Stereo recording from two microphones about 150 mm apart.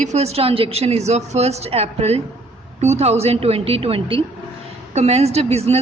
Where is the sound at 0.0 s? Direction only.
45° right (ahead or behind).